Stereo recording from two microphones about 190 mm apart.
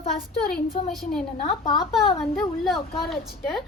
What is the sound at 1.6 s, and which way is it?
Speech, 25° left (ahead or behind).